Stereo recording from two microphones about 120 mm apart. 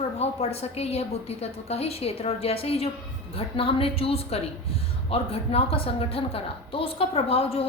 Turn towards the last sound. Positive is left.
turn(degrees=55)  # may be behind; listen again after turning